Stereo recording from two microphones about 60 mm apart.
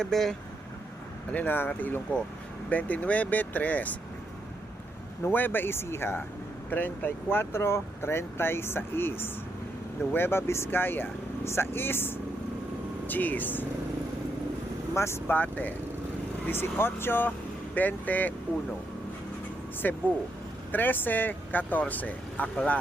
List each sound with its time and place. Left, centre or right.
0.0 s speech: centre
1.3 s speech: left
2.6 s speech: left
5.2 s speech: left
6.7 s speech: left
14.9 s speech: left
15.3 s speech: left
16.5 s speech: left
19.8 s speech: left